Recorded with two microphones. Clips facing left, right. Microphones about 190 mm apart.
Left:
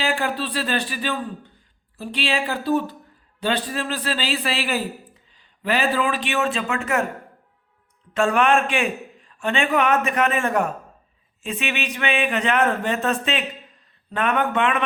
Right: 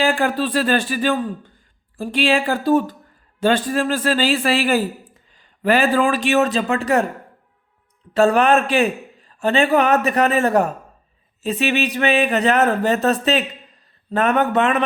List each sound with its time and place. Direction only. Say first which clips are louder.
0.0 s a man's voice: right 6 dB; 50° right (ahead or behind); by 7.0 s 35° right (ahead or behind)
8.1 s a man's voice: right 4 dB; 35° right (ahead or behind)